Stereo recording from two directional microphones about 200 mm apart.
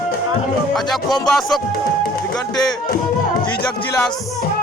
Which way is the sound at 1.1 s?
Centre (ahead or behind).